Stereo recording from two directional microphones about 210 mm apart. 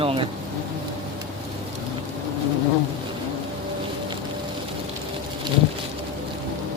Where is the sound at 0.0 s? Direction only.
25° right (ahead or behind).